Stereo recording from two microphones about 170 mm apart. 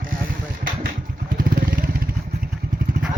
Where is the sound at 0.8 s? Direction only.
55° right (ahead or behind).